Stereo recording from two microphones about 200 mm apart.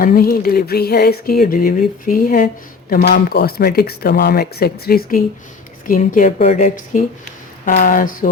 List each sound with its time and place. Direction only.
0.0 s music: 45° left (ahead or behind)
5.8 s a woman's voice: 45° left (ahead or behind)
7.6 s music: 45° left (ahead or behind)